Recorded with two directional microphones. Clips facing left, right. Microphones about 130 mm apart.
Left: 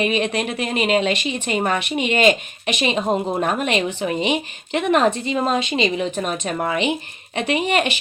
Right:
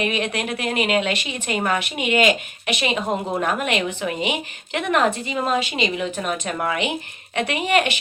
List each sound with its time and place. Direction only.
0.0 s a woman's voice: 20° left (ahead or behind)